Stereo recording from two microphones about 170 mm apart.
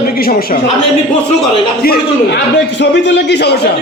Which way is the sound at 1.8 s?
70° left (ahead or behind).